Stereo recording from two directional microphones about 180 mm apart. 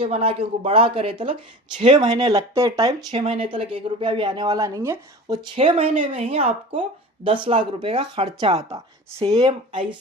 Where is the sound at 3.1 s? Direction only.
35° right (ahead or behind).